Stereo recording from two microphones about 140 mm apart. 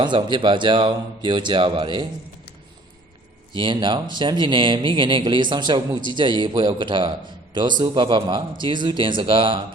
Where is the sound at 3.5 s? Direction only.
35° right (ahead or behind).